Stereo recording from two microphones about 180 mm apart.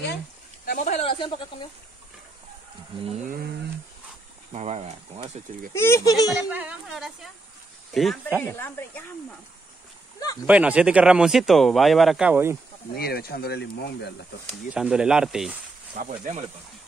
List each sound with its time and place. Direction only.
0.7 s speech: 40° left (ahead or behind)
4.5 s speech: 35° right (ahead or behind)
5.7 s speech: 15° left (ahead or behind)
6.2 s speech: 5° right (ahead or behind)
8.4 s speech: 15° left (ahead or behind)
10.4 s speech: 5° right (ahead or behind)
12.9 s speech: 60° left (ahead or behind)
14.7 s speech: 5° right (ahead or behind)
16.0 s speech: 45° right (ahead or behind)